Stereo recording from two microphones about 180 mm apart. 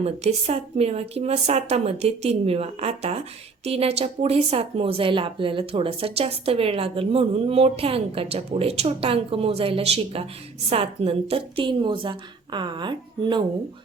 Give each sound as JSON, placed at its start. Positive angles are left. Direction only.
{"t": 0.0, "sound": "a woman's voice", "side_deg": -35}